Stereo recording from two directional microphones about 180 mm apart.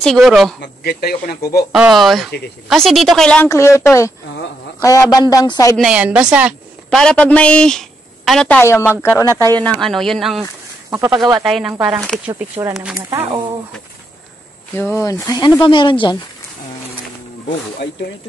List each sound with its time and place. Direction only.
0.0 s speech: centre (ahead or behind)
0.6 s speech: 60° left (ahead or behind)
1.7 s speech: centre (ahead or behind)
3.4 s speech: 15° left (ahead or behind)
5.8 s a woman's voice: 5° right (ahead or behind)
6.3 s a sound: 5° right (ahead or behind)
7.0 s speech: 5° left (ahead or behind)
9.6 s speech: 5° left (ahead or behind)
10.9 s speech: 20° right (ahead or behind)
11.4 s a woman's voice: 5° right (ahead or behind)
14.8 s speech: 15° left (ahead or behind)